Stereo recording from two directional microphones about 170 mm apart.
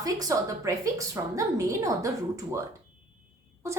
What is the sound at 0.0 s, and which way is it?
A woman's voice, 20° right (ahead or behind).